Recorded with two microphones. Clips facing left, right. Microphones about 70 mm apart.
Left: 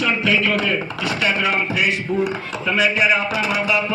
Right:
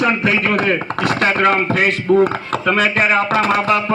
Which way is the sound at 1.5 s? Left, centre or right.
Right.